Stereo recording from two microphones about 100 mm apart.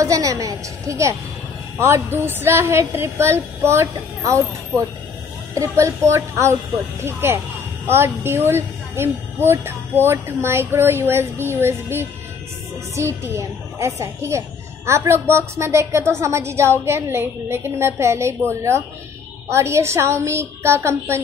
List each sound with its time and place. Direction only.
0.0 s a woman's voice: 35° right (ahead or behind)
19.5 s a woman's voice: 30° right (ahead or behind)